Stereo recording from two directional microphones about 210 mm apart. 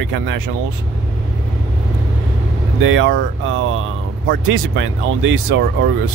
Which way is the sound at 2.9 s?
65° right (ahead or behind).